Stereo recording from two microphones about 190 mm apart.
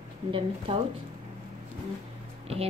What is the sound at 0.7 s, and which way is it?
Speech, 30° right (ahead or behind).